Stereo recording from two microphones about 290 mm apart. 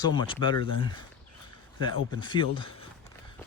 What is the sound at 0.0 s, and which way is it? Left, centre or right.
Speech, centre.